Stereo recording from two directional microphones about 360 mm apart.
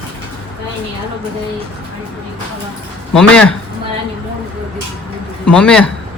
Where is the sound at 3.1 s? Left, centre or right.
Centre.